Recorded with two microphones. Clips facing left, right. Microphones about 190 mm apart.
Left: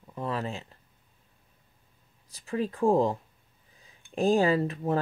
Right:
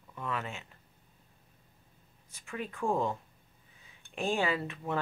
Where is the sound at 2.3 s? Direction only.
35° left (ahead or behind).